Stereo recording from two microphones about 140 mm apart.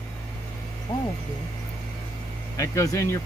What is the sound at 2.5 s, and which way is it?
Speech, 25° left (ahead or behind).